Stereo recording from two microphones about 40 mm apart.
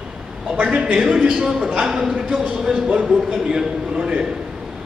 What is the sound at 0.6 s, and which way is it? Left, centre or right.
A man's voice, right.